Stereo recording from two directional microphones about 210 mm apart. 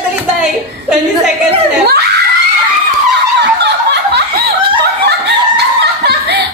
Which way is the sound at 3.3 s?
55° right (ahead or behind).